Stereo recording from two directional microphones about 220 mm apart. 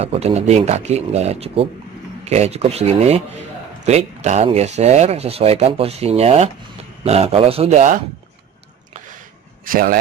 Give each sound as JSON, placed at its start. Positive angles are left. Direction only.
{"t": 0.0, "sound": "speech", "side_deg": -30}
{"t": 9.7, "sound": "a man's voice", "side_deg": -40}